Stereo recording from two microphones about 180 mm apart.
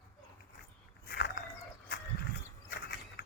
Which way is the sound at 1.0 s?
60° left (ahead or behind).